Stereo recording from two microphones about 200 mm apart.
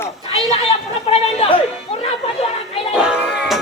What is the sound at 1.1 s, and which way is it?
Speech, 30° left (ahead or behind).